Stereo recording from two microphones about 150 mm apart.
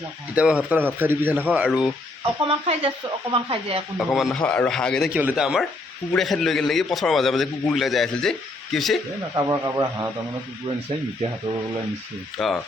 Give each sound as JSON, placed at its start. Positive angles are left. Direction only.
{"t": 0.3, "sound": "speech", "side_deg": -10}
{"t": 2.4, "sound": "speech", "side_deg": -35}
{"t": 3.9, "sound": "a man's voice", "side_deg": 0}
{"t": 5.1, "sound": "a man's voice", "side_deg": -10}
{"t": 9.3, "sound": "a man's voice", "side_deg": -25}
{"t": 12.4, "sound": "a man's voice", "side_deg": 0}